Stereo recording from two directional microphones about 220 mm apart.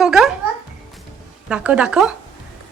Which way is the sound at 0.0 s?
Centre (ahead or behind).